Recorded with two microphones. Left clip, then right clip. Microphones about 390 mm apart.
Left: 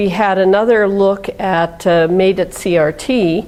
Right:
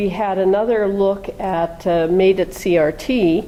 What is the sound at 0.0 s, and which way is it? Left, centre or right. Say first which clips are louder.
Speech: left 5 dB; left.